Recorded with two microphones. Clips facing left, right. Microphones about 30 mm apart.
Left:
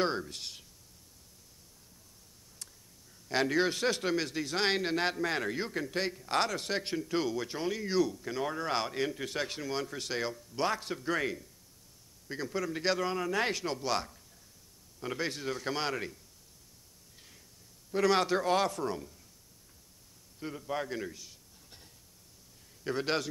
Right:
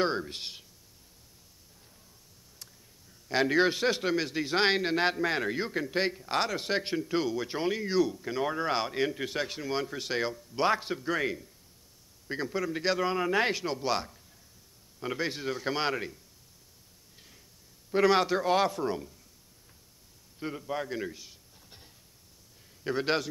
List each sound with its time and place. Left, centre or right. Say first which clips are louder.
0.2 s a man's voice: right 3 dB; right
3.3 s a man's voice: right 4 dB; centre
7.4 s a man's voice: right 4 dB; centre
11.0 s a man's voice: right 2 dB; centre
13.1 s a man's voice: right 4 dB; right
17.9 s a man's voice: right 3 dB; centre
20.3 s a man's voice: right 4 dB; centre
20.6 s a man's voice: even; centre
21.0 s a sound: right 3 dB; centre
22.8 s a man's voice: right 3 dB; centre